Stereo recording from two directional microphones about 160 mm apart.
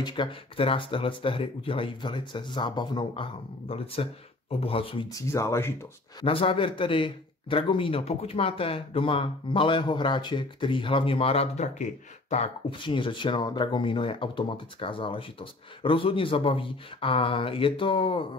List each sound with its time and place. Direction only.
0.0 s speech: 30° left (ahead or behind)
5.1 s speech: 20° left (ahead or behind)
6.2 s speech: 35° left (ahead or behind)
12.8 s speech: 30° left (ahead or behind)